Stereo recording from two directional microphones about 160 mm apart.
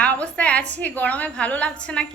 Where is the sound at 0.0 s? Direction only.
10° left (ahead or behind).